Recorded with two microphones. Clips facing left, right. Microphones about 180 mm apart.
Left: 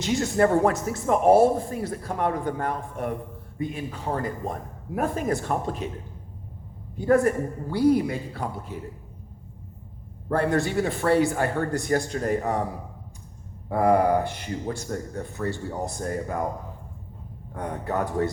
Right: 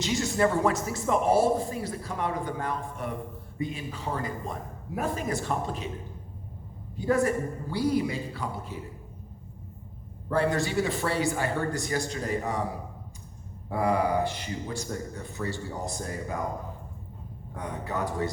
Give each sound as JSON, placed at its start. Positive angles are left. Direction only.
{"t": 0.0, "sound": "speech", "side_deg": 55}
{"t": 6.9, "sound": "speech", "side_deg": 55}
{"t": 10.3, "sound": "speech", "side_deg": 55}
{"t": 13.7, "sound": "speech", "side_deg": 55}
{"t": 17.6, "sound": "speech", "side_deg": 55}